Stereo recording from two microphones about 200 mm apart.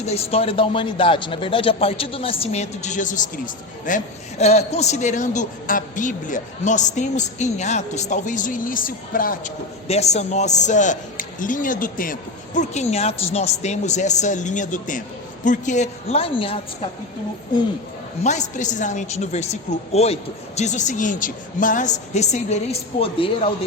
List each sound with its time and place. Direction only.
0.0 s speech: 30° left (ahead or behind)
9.8 s speech: 30° left (ahead or behind)
18.2 s a man's voice: 35° left (ahead or behind)